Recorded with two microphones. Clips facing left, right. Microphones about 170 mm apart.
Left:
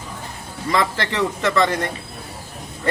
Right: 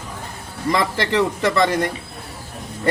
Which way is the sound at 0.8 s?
15° right (ahead or behind).